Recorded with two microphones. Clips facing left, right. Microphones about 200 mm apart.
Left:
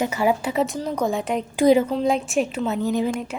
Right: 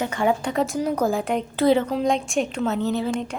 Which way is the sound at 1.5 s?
10° left (ahead or behind).